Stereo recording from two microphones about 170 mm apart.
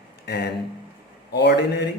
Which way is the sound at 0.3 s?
75° left (ahead or behind).